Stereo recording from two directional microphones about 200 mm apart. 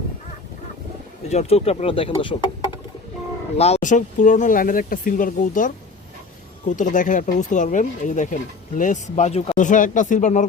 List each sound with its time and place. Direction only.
1.3 s speech: 30° left (ahead or behind)
3.6 s speech: 35° left (ahead or behind)